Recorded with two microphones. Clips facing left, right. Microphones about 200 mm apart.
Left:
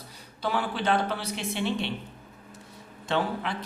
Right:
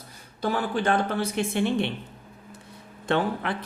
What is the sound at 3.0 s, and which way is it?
Speech, 55° right (ahead or behind).